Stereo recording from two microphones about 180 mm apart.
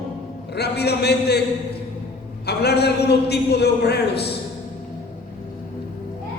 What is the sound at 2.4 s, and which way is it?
A woman's voice, 65° left (ahead or behind).